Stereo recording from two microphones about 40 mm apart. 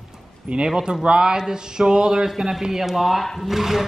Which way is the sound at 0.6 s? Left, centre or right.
Centre.